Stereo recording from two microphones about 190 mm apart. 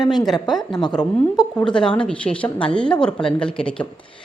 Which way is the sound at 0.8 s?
20° left (ahead or behind).